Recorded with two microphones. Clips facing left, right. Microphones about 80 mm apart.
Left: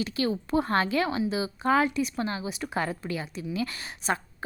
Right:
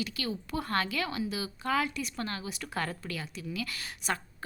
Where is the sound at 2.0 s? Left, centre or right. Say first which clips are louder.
Left 7 dB; centre.